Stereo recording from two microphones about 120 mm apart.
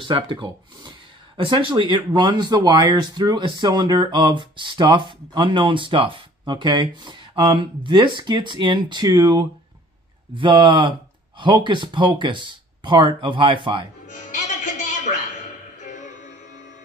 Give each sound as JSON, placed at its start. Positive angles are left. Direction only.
{"t": 0.0, "sound": "speech", "side_deg": -45}
{"t": 14.0, "sound": "music", "side_deg": 90}